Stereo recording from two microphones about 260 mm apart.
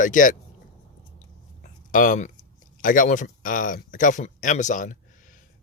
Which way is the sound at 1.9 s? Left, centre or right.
Left.